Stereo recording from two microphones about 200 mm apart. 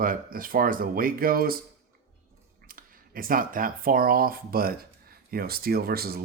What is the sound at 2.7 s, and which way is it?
Speech, 45° right (ahead or behind).